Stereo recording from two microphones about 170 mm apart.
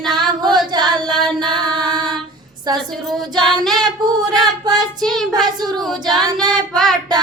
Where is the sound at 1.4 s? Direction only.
25° right (ahead or behind).